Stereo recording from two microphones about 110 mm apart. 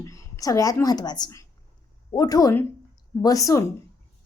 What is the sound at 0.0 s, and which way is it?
Speech, 30° left (ahead or behind).